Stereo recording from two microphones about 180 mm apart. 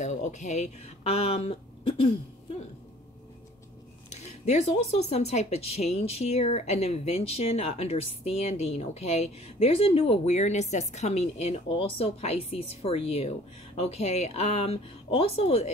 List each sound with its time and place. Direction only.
0.0 s speech: 40° left (ahead or behind)
4.1 s speech: 40° left (ahead or behind)